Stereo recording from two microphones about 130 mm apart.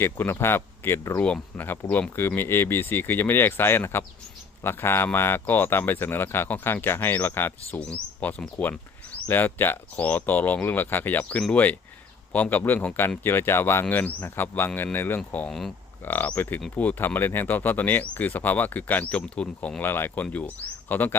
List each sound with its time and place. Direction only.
0.0 s speech: 15° left (ahead or behind)
16.0 s speech: 15° left (ahead or behind)